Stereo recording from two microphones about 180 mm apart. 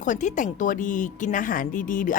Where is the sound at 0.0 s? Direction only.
45° left (ahead or behind).